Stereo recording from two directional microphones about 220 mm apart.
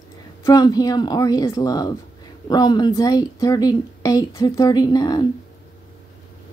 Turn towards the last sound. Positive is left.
turn(degrees=15)  # may be behind; listen again after turning